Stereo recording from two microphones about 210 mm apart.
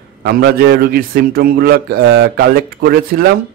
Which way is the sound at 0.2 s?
50° right (ahead or behind).